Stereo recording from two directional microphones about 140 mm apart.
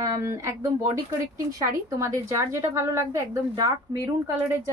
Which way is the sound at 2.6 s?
20° right (ahead or behind).